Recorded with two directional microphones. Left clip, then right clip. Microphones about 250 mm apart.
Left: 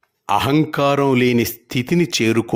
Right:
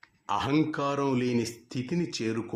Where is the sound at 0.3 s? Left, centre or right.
Left.